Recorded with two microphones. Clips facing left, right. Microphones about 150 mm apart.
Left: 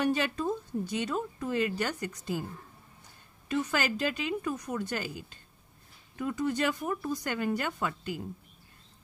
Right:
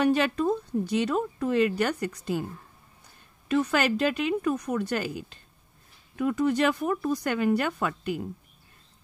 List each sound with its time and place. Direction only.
0.0 s a woman's voice: 75° right (ahead or behind)
3.4 s a woman's voice: 65° right (ahead or behind)